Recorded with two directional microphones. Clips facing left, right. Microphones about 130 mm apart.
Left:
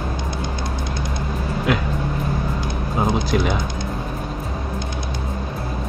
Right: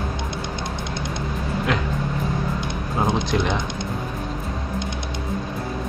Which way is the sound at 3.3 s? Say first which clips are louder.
Left 2 dB; 5° left (ahead or behind).